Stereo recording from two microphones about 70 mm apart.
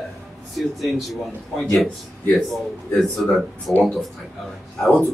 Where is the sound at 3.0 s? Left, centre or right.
Centre.